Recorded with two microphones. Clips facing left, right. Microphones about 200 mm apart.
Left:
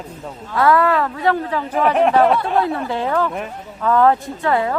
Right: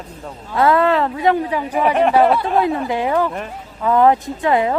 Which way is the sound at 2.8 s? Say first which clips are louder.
Right 2 dB; 15° right (ahead or behind).